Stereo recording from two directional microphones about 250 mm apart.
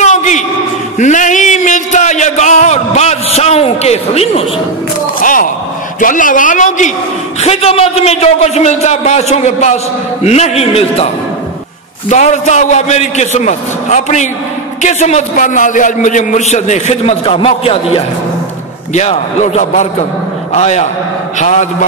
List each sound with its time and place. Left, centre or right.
0.0 s a sound: left
5.9 s a man's voice: left
12.1 s a man's voice: left